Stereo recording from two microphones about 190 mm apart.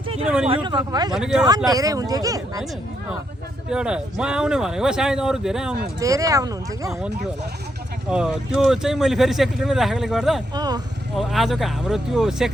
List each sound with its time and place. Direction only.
0.4 s speech: 25° right (ahead or behind)
1.1 s speech: 5° right (ahead or behind)
1.5 s speech: 20° right (ahead or behind)
3.7 s speech: 5° right (ahead or behind)
6.0 s speech: 15° right (ahead or behind)
8.1 s speech: 5° right (ahead or behind)
10.5 s speech: 20° right (ahead or behind)
11.2 s speech: centre (ahead or behind)